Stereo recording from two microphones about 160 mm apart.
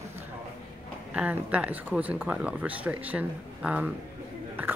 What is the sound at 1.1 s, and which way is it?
Speech, 10° right (ahead or behind).